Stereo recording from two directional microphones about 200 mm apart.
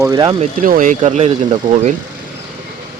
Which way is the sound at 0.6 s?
45° right (ahead or behind).